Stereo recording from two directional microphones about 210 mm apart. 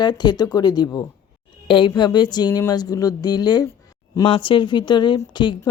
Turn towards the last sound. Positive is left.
turn(degrees=20)  # may be behind; listen again after turning